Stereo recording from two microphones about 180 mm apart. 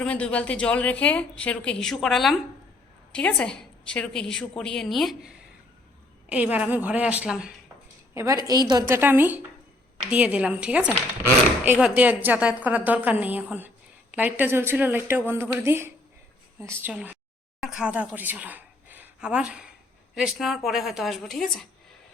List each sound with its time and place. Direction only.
0.0 s a woman's voice: 5° left (ahead or behind)
8.1 s a woman's voice: 15° right (ahead or behind); by 21.7 s centre (ahead or behind)